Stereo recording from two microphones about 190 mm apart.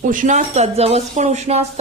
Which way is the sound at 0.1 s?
40° right (ahead or behind).